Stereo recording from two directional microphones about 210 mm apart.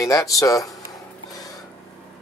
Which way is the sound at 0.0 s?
15° left (ahead or behind).